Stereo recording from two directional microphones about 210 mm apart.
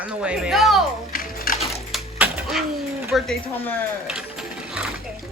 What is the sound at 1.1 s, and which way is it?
Music, 45° left (ahead or behind).